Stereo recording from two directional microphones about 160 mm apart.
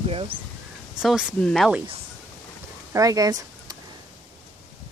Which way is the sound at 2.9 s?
20° right (ahead or behind).